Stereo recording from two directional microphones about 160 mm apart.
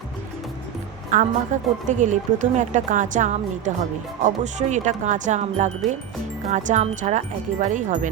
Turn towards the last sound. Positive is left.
turn(degrees=-50)  # may be behind; listen again after turning